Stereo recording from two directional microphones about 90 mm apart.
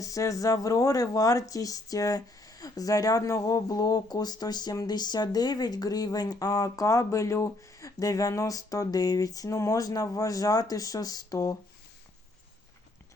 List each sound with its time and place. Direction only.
0.0 s speech: 35° left (ahead or behind)